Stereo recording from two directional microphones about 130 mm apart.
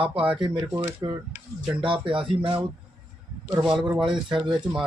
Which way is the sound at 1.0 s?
30° right (ahead or behind).